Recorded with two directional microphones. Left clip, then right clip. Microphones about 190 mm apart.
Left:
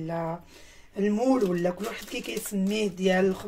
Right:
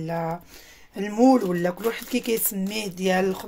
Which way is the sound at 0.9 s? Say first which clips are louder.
Right 5 dB; 65° right (ahead or behind).